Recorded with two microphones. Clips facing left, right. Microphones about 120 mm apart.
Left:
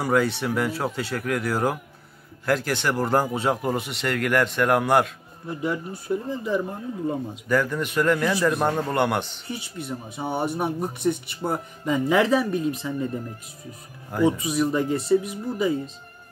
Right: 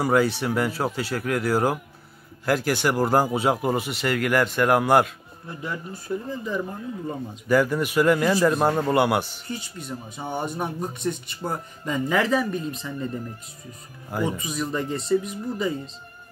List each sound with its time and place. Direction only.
0.0 s speech: 5° right (ahead or behind)
5.5 s speech: 10° left (ahead or behind)
7.4 s a man's voice: 10° right (ahead or behind)
8.6 s a man's voice: 5° right (ahead or behind)
9.5 s speech: 65° left (ahead or behind)
10.1 s speech: 5° left (ahead or behind)
14.2 s speech: 10° left (ahead or behind)